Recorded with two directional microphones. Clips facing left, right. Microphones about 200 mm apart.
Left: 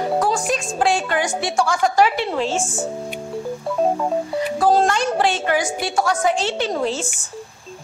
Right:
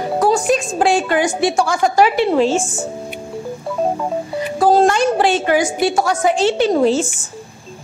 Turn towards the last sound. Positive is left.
turn(degrees=-5)  # may be behind; listen again after turning